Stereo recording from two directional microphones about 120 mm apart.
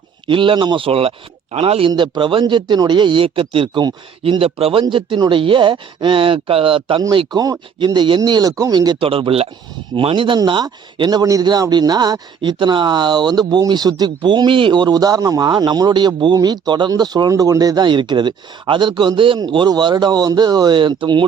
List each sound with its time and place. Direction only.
0.3 s speech: 45° right (ahead or behind)
1.9 s a man's voice: 40° right (ahead or behind)
9.0 s a man's voice: 50° right (ahead or behind)